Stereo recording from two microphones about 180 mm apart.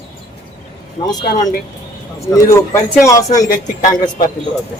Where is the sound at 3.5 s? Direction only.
50° left (ahead or behind).